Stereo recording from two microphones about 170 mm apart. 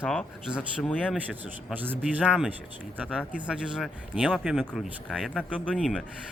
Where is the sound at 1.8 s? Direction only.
10° right (ahead or behind).